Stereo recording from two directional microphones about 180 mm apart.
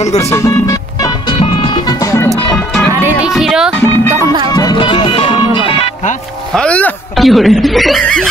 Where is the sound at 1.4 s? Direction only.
25° left (ahead or behind).